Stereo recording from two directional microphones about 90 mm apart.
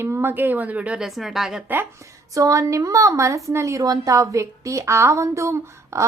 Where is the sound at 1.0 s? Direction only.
Centre (ahead or behind).